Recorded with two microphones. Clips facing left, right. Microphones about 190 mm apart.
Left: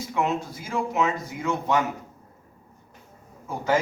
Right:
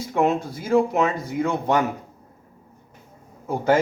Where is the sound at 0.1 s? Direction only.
55° right (ahead or behind).